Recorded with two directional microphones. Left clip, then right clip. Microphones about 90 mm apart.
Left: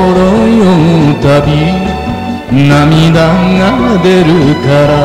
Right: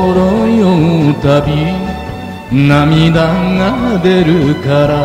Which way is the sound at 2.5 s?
35° right (ahead or behind).